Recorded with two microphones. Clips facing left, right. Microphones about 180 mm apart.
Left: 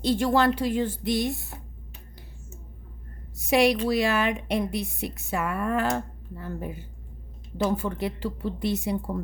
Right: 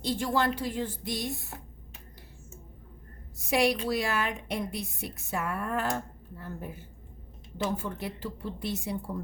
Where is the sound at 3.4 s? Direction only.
75° left (ahead or behind).